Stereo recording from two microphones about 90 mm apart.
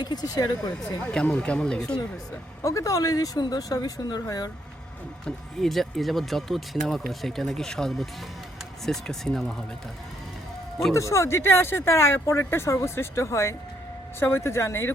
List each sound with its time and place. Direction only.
0.0 s a woman's voice: 50° left (ahead or behind)
1.0 s speech: 10° left (ahead or behind)
2.6 s a woman's voice: 35° left (ahead or behind)
5.2 s speech: centre (ahead or behind)
10.9 s speech: 35° left (ahead or behind)